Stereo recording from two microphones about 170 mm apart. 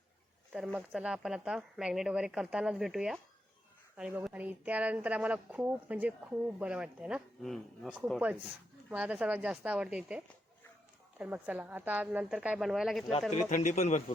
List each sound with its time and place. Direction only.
0.9 s a woman's voice: 5° right (ahead or behind)
13.3 s a man's voice: 45° left (ahead or behind)